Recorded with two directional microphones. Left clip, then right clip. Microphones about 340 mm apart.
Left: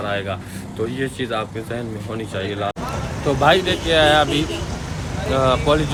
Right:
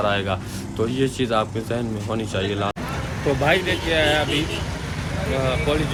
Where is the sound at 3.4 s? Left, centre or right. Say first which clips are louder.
Left 5 dB; centre.